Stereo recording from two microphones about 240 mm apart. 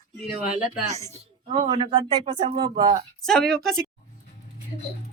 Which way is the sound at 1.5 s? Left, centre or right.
Right.